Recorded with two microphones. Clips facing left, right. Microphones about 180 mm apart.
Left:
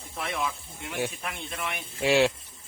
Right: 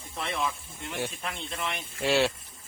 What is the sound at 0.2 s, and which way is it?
Speech, 5° left (ahead or behind).